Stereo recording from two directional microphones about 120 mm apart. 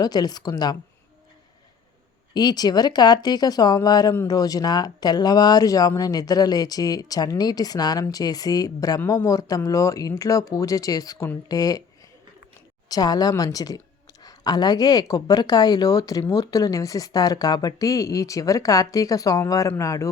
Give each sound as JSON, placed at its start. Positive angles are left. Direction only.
{"t": 0.0, "sound": "speech", "side_deg": 35}
{"t": 2.3, "sound": "speech", "side_deg": 35}
{"t": 12.9, "sound": "a woman's voice", "side_deg": 30}